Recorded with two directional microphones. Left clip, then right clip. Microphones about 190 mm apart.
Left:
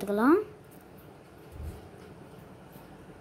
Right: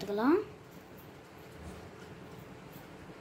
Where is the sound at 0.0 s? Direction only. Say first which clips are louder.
Left 5 dB; 45° left (ahead or behind).